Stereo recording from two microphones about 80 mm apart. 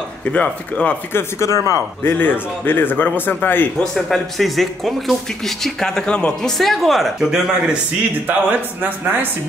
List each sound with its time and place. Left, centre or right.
0.2 s speech: centre
1.1 s speech: left
2.0 s speech: left
3.8 s speech: centre
6.6 s speech: centre
8.3 s speech: right